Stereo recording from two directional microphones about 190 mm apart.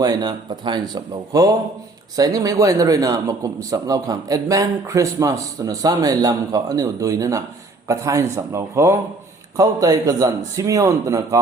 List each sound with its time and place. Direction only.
0.0 s a man's voice: 20° right (ahead or behind)